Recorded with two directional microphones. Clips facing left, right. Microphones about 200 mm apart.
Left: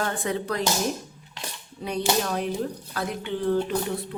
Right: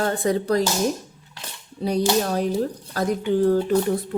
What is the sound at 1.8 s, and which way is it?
Speech, 35° right (ahead or behind).